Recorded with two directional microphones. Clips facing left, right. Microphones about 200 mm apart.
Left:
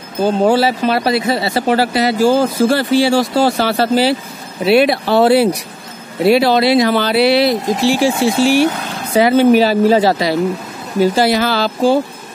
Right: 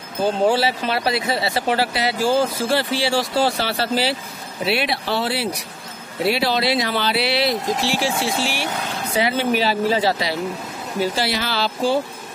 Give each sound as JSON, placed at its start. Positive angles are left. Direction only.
{"t": 0.5, "sound": "speech", "side_deg": 45}